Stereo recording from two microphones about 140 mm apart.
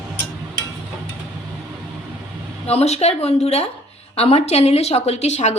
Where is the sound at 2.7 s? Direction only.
50° left (ahead or behind).